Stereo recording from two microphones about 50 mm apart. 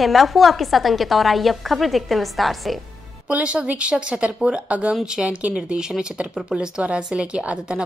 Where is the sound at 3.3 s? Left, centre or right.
Right.